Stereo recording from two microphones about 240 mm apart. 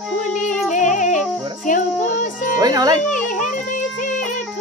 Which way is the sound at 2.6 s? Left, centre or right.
Centre.